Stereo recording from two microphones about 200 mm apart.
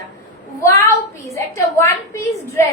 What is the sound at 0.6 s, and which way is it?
A woman's voice, 15° left (ahead or behind).